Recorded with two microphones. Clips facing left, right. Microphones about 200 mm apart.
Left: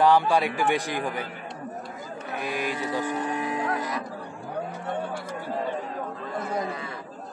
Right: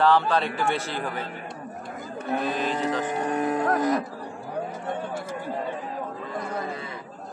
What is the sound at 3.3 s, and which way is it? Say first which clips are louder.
Music: right 4 dB; 50° right (ahead or behind).